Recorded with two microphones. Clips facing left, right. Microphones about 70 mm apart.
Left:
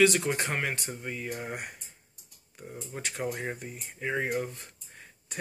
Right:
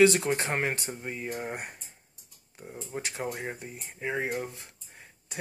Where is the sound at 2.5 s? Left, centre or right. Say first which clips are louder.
Right 2 dB; centre.